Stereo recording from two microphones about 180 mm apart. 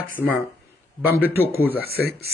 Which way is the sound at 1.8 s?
60° left (ahead or behind).